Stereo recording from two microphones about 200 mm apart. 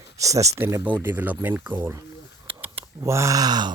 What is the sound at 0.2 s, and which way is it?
Speech, 15° right (ahead or behind).